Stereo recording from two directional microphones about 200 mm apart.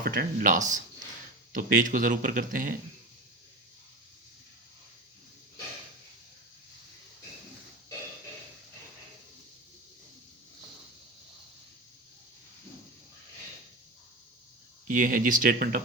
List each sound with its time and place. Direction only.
0.0 s speech: 45° right (ahead or behind)
14.8 s speech: 45° right (ahead or behind)